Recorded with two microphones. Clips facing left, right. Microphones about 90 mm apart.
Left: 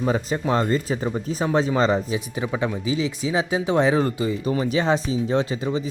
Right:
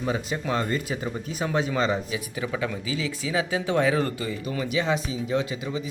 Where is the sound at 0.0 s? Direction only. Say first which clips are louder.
Left 5 dB; 35° left (ahead or behind); by 4.4 s 20° left (ahead or behind).